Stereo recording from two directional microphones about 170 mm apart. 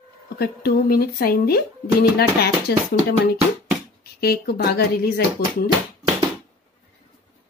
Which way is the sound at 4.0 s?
65° left (ahead or behind).